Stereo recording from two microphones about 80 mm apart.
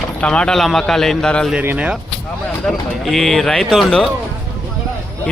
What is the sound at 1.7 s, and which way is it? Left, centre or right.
Speech, centre.